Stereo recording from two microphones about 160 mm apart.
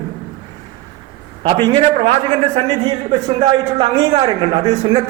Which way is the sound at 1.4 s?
30° right (ahead or behind).